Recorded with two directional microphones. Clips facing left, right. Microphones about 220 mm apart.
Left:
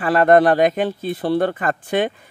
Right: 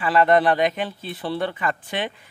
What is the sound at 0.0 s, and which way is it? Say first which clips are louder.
Speech: left 4 dB; 45° left (ahead or behind).